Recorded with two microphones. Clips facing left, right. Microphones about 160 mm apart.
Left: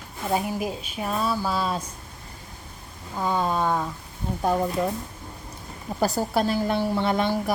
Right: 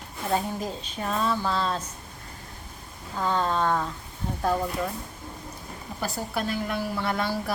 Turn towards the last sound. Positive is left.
turn(degrees=20)  # may be behind; listen again after turning